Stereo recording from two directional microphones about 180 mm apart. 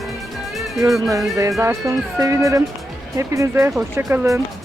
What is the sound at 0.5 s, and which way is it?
Music, centre (ahead or behind).